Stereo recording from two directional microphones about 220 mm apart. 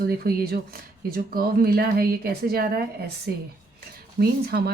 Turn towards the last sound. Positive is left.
turn(degrees=-45)  # may be behind; listen again after turning